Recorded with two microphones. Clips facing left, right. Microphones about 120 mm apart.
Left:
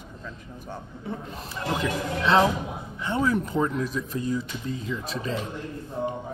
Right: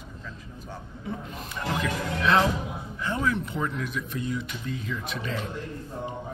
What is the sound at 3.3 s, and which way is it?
Speech, 35° left (ahead or behind).